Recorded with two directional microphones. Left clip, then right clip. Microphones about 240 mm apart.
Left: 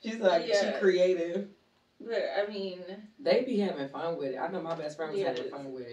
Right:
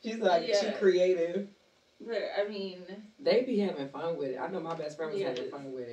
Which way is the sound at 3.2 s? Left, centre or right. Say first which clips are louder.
Even; centre.